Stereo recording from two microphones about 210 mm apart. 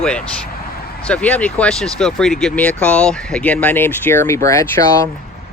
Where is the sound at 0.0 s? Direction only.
5° left (ahead or behind).